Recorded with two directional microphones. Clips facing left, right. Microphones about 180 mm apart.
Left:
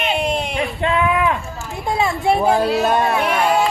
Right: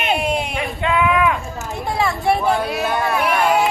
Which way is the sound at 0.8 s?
30° left (ahead or behind).